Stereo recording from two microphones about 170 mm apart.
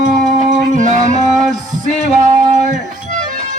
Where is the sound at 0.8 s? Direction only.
45° right (ahead or behind).